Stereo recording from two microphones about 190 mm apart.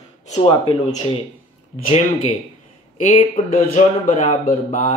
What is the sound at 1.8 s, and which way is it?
Speech, 35° left (ahead or behind).